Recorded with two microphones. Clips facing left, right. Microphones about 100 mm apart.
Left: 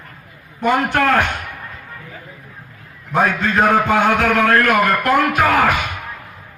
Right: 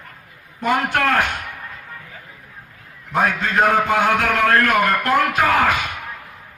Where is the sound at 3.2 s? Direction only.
35° left (ahead or behind).